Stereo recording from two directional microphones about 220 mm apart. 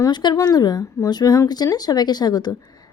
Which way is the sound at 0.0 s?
20° left (ahead or behind).